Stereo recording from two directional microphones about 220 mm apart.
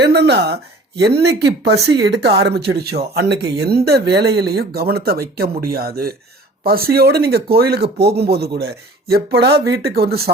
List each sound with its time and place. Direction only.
0.0 s speech: 50° right (ahead or behind)